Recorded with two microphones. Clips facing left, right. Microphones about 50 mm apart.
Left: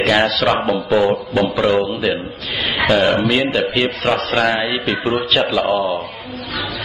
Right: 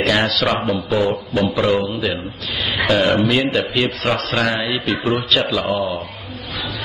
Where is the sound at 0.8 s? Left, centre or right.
Centre.